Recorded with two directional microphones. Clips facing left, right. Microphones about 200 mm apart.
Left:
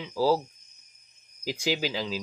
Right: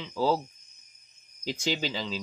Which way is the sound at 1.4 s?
5° left (ahead or behind).